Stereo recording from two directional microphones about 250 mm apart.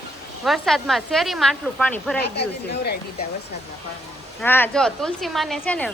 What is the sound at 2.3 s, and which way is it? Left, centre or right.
Speech, left.